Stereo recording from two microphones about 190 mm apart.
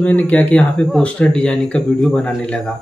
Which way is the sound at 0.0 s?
5° left (ahead or behind).